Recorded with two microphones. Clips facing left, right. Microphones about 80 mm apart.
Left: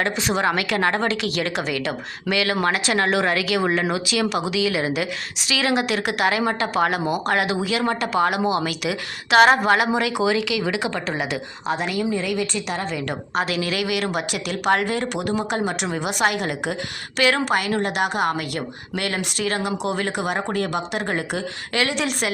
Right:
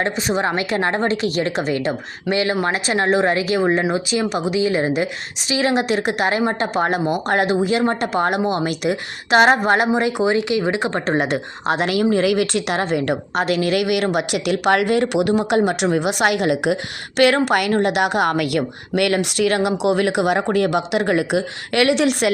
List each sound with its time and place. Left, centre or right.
0.0 s a woman's voice: right
8.1 s a woman's voice: right
12.1 s a woman's voice: right
17.2 s a woman's voice: right
17.7 s a woman's voice: right
17.9 s a woman's voice: right